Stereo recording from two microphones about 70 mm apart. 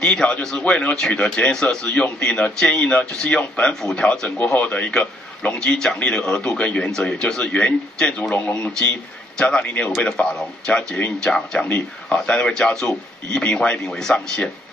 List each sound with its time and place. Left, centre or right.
0.0 s a man's voice: centre